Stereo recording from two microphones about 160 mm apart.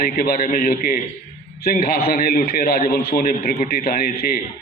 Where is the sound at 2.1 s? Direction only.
70° left (ahead or behind).